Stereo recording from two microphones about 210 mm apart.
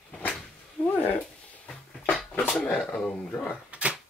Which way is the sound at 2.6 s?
5° left (ahead or behind).